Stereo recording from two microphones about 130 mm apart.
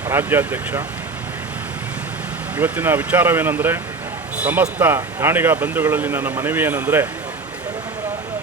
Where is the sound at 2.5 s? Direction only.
15° right (ahead or behind).